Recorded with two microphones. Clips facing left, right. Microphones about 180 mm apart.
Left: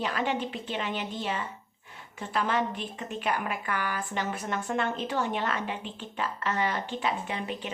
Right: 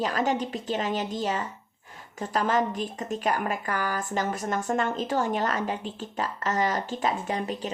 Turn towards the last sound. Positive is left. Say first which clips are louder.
# right 4 dB
turn(degrees=-40)  # may be behind; listen again after turning